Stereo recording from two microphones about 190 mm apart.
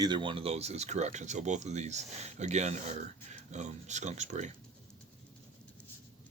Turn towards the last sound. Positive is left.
turn(degrees=-40)  # may be behind; listen again after turning